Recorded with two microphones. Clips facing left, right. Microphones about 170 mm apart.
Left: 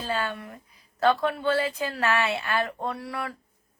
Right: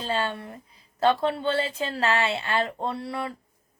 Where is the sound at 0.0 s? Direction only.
25° right (ahead or behind).